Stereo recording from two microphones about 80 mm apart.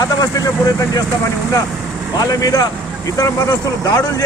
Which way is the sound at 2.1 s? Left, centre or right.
Left.